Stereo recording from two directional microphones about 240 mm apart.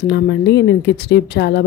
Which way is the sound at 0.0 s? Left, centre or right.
Left.